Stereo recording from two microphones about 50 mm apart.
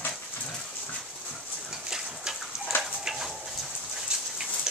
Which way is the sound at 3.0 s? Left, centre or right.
Centre.